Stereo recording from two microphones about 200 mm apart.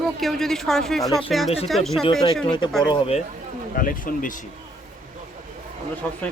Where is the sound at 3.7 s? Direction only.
45° left (ahead or behind).